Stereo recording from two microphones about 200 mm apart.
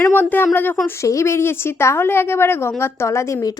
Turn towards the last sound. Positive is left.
turn(degrees=15)  # may be behind; listen again after turning